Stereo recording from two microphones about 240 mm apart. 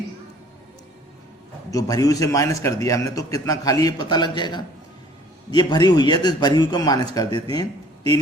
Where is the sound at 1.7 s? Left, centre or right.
Centre.